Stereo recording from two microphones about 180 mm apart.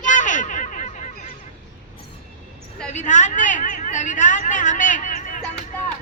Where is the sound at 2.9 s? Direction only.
45° left (ahead or behind).